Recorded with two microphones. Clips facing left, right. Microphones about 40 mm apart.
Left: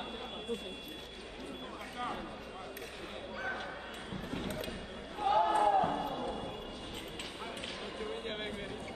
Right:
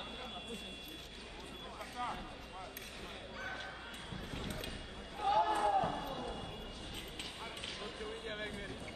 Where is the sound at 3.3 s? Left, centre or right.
Centre.